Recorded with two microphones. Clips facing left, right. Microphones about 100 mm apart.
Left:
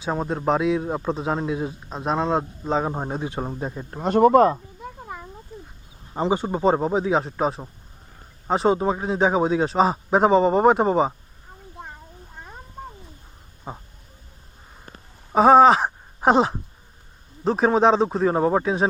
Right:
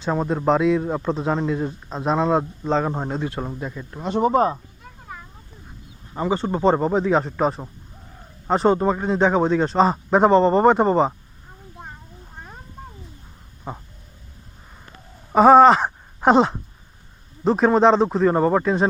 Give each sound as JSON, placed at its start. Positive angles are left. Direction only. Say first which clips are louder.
{"t": 0.0, "sound": "a man's voice", "louder": "right 3 dB", "side_deg": 5}
{"t": 2.8, "sound": "speech", "louder": "right 2 dB", "side_deg": 15}
{"t": 3.6, "sound": "speech", "louder": "left 2 dB", "side_deg": 35}
{"t": 6.3, "sound": "a man's voice", "louder": "right 2 dB", "side_deg": 10}
{"t": 15.3, "sound": "a man's voice", "louder": "right 2 dB", "side_deg": 0}